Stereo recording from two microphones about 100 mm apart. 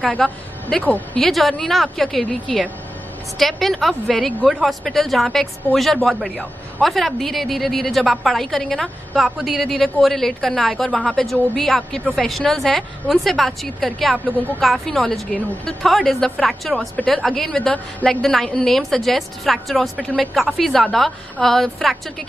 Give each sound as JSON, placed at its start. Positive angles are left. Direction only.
{"t": 0.2, "sound": "a woman's voice", "side_deg": 5}
{"t": 0.8, "sound": "speech", "side_deg": 15}
{"t": 1.2, "sound": "a woman's voice", "side_deg": 0}